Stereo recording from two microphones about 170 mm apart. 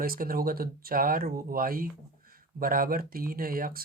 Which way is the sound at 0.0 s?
55° right (ahead or behind).